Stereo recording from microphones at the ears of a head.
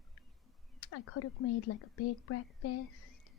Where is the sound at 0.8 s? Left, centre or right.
Left.